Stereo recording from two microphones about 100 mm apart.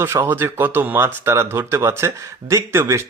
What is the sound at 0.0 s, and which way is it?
Speech, 25° right (ahead or behind).